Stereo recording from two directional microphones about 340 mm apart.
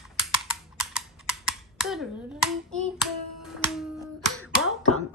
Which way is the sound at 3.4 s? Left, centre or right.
Centre.